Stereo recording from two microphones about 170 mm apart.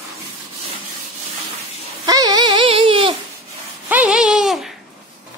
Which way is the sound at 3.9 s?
5° right (ahead or behind).